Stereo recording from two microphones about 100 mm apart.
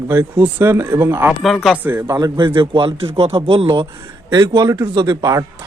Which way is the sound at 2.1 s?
40° right (ahead or behind).